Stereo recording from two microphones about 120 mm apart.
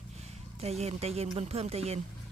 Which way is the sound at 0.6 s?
60° right (ahead or behind).